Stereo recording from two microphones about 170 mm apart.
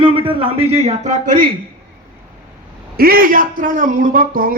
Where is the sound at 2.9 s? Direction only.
60° right (ahead or behind).